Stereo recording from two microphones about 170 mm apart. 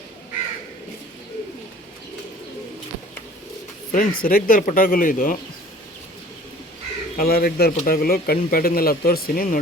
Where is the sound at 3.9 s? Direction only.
55° left (ahead or behind).